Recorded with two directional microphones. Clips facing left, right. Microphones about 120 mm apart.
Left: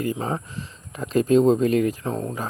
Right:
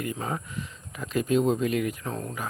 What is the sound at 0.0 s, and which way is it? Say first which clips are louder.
Speech: left 5 dB; 30° left (ahead or behind).